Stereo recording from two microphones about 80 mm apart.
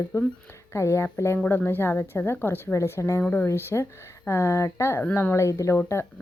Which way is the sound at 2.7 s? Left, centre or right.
Left.